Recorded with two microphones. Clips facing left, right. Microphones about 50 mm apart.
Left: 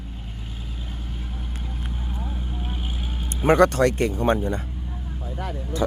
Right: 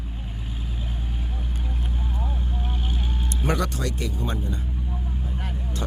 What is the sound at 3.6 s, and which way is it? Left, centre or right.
Speech, left.